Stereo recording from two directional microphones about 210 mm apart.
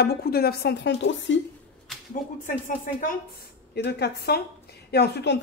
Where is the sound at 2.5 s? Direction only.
40° left (ahead or behind).